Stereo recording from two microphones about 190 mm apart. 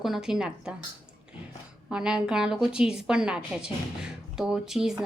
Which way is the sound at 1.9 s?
5° right (ahead or behind).